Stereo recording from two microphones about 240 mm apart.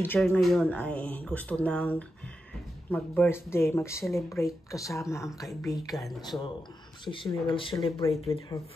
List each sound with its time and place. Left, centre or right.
0.0 s speech: centre
5.9 s speech: centre
7.1 s speech: left